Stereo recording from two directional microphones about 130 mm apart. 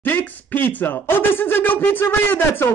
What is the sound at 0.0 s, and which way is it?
Speech, 15° left (ahead or behind).